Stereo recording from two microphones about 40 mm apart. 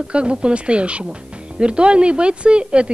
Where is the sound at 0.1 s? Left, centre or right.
Right.